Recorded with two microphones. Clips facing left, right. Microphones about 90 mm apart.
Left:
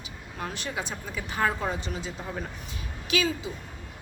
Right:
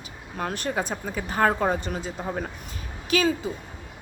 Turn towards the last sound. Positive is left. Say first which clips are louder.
# right 4 dB
turn(degrees=-45)  # may be behind; listen again after turning